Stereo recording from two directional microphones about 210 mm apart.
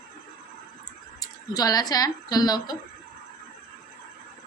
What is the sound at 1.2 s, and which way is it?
Speech, 20° left (ahead or behind).